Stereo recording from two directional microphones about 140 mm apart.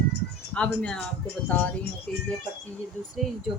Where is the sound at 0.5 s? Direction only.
5° left (ahead or behind).